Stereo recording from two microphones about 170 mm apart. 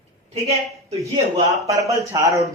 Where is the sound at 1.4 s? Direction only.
20° right (ahead or behind).